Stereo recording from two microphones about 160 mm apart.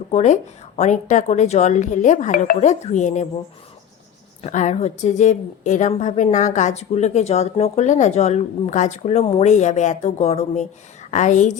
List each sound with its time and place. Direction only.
0.1 s a woman's voice: 45° left (ahead or behind)
4.4 s a woman's voice: 50° left (ahead or behind)